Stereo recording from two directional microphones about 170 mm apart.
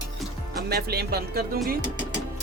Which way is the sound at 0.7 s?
70° right (ahead or behind).